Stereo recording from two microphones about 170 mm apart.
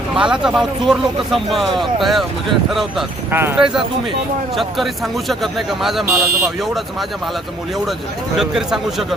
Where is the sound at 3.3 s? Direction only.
15° right (ahead or behind).